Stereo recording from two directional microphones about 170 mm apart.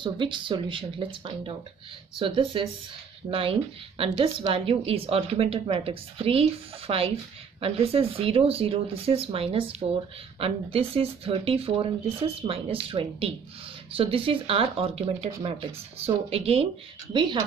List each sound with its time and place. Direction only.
0.0 s a woman's voice: 30° right (ahead or behind)
13.9 s a woman's voice: 35° right (ahead or behind)